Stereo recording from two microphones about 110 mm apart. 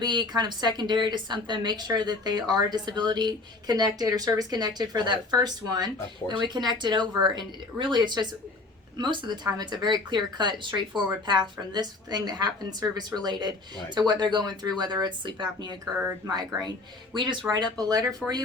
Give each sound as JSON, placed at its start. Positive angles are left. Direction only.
{"t": 0.0, "sound": "a woman's voice", "side_deg": -40}